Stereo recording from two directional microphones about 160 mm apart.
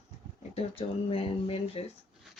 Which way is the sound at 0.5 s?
35° left (ahead or behind).